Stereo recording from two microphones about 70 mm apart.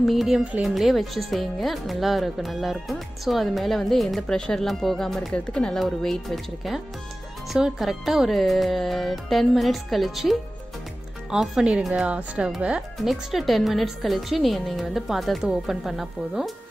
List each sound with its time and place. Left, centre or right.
0.0 s speech: centre
5.8 s speech: centre
12.1 s speech: centre
13.1 s speech: centre